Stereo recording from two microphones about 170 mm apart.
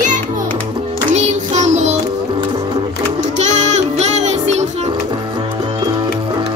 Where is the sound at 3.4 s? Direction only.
45° right (ahead or behind).